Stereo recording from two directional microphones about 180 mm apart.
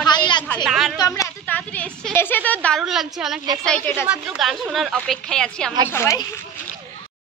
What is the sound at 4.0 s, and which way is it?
A woman's voice, 5° right (ahead or behind).